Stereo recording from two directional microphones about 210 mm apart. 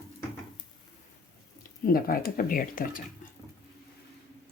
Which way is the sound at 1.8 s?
45° left (ahead or behind).